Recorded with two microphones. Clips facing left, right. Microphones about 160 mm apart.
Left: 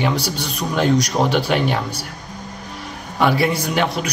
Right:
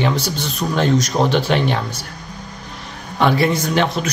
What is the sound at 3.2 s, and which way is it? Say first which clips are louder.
Speech: right 1 dB; 10° left (ahead or behind).